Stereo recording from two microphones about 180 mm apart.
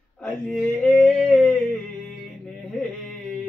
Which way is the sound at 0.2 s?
5° left (ahead or behind).